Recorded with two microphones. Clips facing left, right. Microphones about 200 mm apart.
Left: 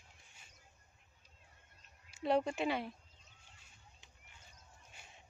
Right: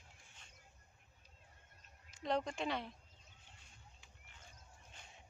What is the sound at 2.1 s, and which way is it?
Speech, 10° left (ahead or behind).